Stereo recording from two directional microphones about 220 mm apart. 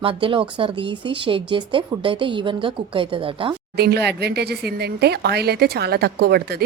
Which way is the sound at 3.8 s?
50° right (ahead or behind).